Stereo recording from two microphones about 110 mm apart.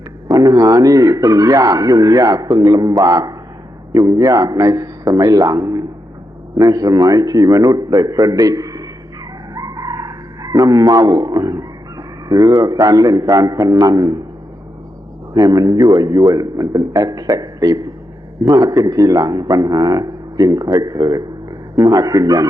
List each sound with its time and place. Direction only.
0.3 s a man's voice: 35° right (ahead or behind)
15.3 s a man's voice: 35° right (ahead or behind)